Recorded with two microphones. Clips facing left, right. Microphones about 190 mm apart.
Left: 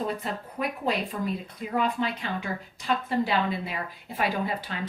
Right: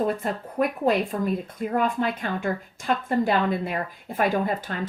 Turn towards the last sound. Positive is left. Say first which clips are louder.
# right 5 dB
turn(degrees=-50)  # may be behind; listen again after turning